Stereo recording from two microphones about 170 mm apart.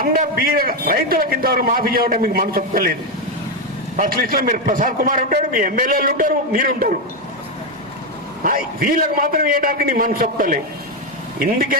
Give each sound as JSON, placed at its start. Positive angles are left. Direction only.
{"t": 0.0, "sound": "a man's voice", "side_deg": -55}
{"t": 3.9, "sound": "a man's voice", "side_deg": -55}
{"t": 8.4, "sound": "a man's voice", "side_deg": -55}